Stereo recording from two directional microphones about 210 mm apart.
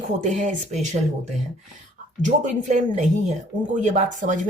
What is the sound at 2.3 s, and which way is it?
Speech, 35° right (ahead or behind).